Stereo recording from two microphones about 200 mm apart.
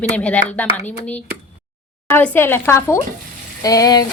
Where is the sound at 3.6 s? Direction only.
20° left (ahead or behind).